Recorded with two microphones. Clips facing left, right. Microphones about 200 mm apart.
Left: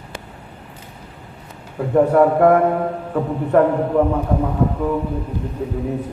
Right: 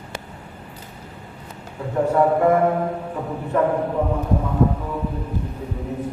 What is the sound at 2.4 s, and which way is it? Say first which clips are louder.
Mantra: left 3 dB; 60° left (ahead or behind).